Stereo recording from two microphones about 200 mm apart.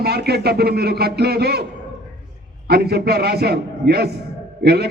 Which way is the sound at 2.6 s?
50° right (ahead or behind).